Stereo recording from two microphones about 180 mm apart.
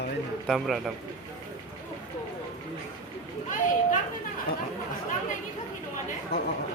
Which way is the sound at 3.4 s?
45° left (ahead or behind).